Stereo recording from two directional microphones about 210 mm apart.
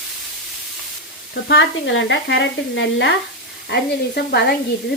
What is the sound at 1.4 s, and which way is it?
Speech, 60° left (ahead or behind).